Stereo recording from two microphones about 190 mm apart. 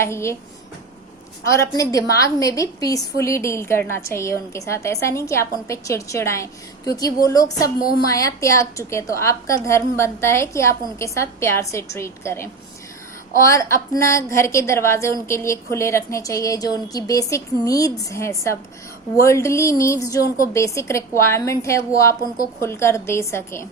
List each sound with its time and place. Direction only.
0.0 s a woman's voice: 15° left (ahead or behind)
1.7 s a woman's voice: 20° left (ahead or behind)